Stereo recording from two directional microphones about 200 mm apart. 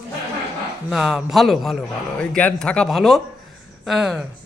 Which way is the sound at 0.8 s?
Centre (ahead or behind).